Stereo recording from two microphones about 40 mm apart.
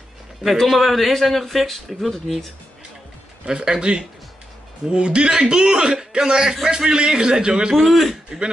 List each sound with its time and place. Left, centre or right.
0.7 s speech: centre
3.4 s a man's voice: right
7.7 s speech: centre